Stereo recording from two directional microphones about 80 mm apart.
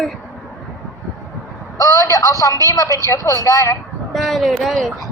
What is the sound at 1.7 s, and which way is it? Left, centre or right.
Speech, left.